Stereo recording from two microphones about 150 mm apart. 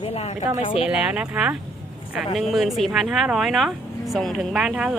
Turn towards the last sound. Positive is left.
turn(degrees=-5)  # may be behind; listen again after turning